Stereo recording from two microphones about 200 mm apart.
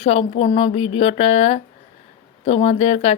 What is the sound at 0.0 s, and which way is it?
Speech, 30° left (ahead or behind).